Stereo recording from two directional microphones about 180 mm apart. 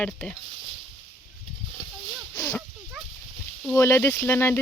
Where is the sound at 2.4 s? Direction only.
15° left (ahead or behind).